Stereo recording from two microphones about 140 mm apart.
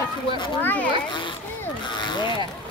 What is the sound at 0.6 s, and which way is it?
Speech, 15° left (ahead or behind).